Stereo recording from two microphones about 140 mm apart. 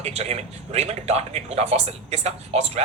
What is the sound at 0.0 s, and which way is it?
Speech, 50° right (ahead or behind).